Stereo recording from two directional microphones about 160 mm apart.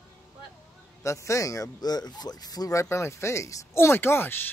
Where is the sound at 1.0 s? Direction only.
20° left (ahead or behind).